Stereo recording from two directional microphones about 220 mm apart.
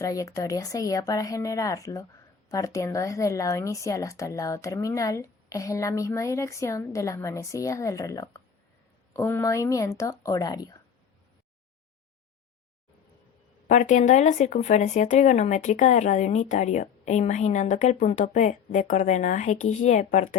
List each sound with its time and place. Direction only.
0.0 s a woman's voice: 15° left (ahead or behind)
13.7 s speech: 35° left (ahead or behind)